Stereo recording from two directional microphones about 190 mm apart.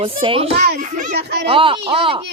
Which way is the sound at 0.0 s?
30° right (ahead or behind).